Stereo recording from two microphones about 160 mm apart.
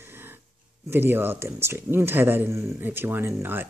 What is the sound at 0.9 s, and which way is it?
A man's voice, 15° right (ahead or behind).